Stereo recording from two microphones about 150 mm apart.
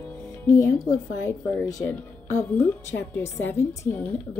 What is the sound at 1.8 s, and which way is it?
A woman's voice, 15° left (ahead or behind).